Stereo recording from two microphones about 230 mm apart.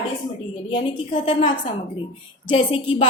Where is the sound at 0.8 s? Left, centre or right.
Left.